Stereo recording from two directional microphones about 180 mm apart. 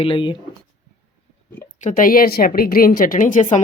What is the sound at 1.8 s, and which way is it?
A woman's voice, 45° left (ahead or behind).